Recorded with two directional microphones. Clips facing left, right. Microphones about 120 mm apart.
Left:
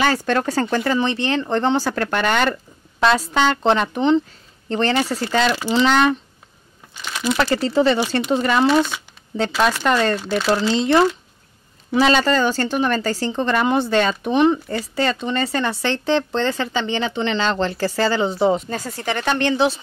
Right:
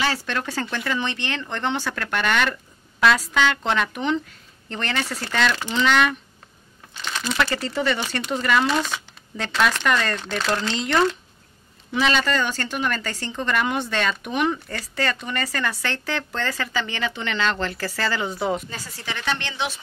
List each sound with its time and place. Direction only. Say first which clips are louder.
0.0 s speech: left 7 dB; 45° left (ahead or behind)
7.0 s a sound: left 5 dB; 10° left (ahead or behind)
7.3 s speech: left 7 dB; 35° left (ahead or behind)
8.6 s speech: left 7 dB; 5° left (ahead or behind)
9.8 s speech: left 5 dB; 35° left (ahead or behind)
10.1 s speech: left 6 dB; 5° left (ahead or behind)
11.9 s speech: left 6 dB; 35° left (ahead or behind)
18.7 s speech: left 9 dB; 50° left (ahead or behind)